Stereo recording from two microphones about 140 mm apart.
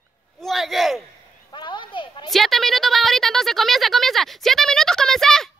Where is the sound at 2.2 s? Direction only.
Centre (ahead or behind).